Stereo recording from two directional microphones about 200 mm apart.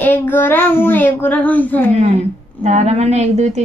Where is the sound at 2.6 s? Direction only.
35° right (ahead or behind).